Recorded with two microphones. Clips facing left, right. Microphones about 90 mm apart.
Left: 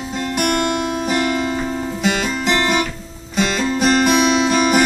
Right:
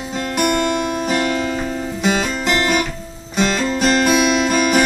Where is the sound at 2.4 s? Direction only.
20° left (ahead or behind).